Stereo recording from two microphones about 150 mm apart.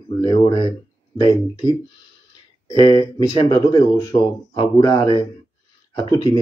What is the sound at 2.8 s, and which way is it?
Speech, 25° left (ahead or behind).